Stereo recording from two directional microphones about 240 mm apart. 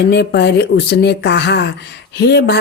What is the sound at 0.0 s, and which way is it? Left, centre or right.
Speech, left.